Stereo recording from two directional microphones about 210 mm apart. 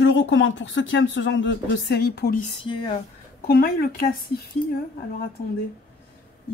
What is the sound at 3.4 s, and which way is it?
Speech, 45° left (ahead or behind).